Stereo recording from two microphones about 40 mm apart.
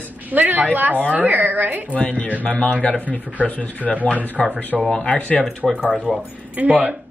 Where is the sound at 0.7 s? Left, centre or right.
Right.